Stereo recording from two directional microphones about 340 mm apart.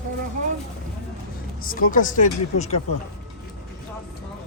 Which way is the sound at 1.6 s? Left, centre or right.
Left.